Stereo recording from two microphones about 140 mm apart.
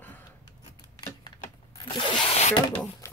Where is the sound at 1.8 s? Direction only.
40° left (ahead or behind).